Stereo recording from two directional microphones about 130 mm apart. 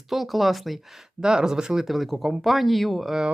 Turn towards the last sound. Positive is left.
turn(degrees=0)  # may be behind; listen again after turning